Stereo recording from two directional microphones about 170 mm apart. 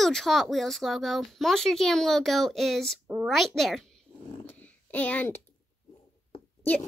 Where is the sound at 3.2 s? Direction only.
Centre (ahead or behind).